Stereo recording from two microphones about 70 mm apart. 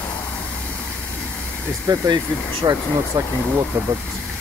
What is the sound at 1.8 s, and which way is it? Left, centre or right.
Speech, right.